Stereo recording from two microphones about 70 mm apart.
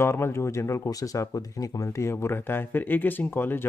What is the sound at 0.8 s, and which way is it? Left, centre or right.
Speech, left.